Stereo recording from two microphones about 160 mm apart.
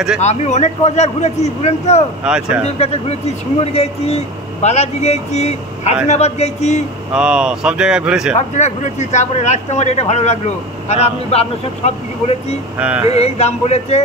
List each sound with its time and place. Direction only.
0.2 s speech: 45° left (ahead or behind)
2.2 s speech: 5° right (ahead or behind)
2.6 s speech: 40° left (ahead or behind)
7.2 s speech: 5° right (ahead or behind)
8.4 s speech: 45° left (ahead or behind)
12.7 s male singing: 10° right (ahead or behind)
13.1 s speech: 40° left (ahead or behind)